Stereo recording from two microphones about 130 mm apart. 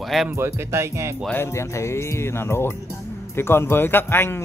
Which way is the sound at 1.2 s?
20° left (ahead or behind).